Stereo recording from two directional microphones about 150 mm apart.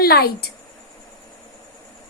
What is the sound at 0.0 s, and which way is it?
Speech, 90° left.